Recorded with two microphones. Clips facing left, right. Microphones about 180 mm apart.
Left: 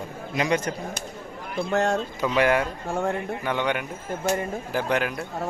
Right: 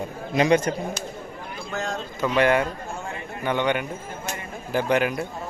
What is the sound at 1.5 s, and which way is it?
Speech, 65° left (ahead or behind).